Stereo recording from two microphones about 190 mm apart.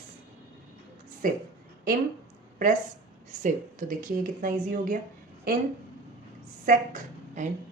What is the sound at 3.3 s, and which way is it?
Speech, 40° right (ahead or behind).